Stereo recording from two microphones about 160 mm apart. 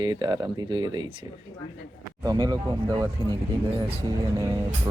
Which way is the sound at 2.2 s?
20° right (ahead or behind).